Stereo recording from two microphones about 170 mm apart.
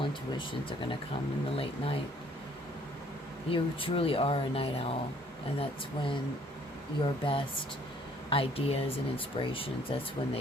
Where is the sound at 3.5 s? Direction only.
30° left (ahead or behind).